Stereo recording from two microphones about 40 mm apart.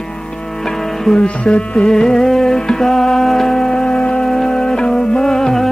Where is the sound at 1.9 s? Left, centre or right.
Centre.